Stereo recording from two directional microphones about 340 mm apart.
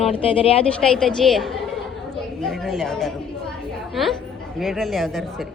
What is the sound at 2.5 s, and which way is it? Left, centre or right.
Speech, centre.